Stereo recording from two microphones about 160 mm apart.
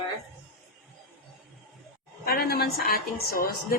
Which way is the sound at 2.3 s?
75° left (ahead or behind).